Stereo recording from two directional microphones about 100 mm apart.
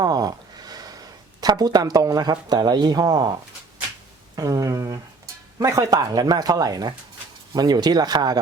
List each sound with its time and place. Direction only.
0.0 s a sound: 40° right (ahead or behind)
1.4 s speech: 40° right (ahead or behind)
4.4 s speech: 35° right (ahead or behind)